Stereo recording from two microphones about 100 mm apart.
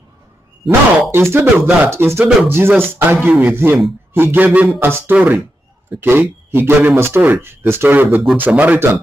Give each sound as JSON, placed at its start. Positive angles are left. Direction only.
{"t": 1.1, "sound": "a man's voice", "side_deg": -25}